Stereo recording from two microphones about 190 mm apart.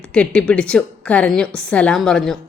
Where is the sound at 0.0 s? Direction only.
5° left (ahead or behind).